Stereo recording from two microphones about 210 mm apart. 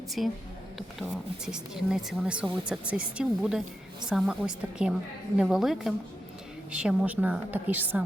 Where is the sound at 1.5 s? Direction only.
5° right (ahead or behind).